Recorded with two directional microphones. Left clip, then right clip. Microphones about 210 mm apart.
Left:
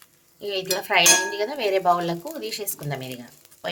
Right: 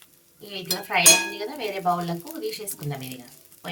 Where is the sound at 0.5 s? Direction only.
50° left (ahead or behind).